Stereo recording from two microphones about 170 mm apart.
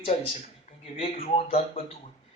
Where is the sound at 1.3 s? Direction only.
40° left (ahead or behind).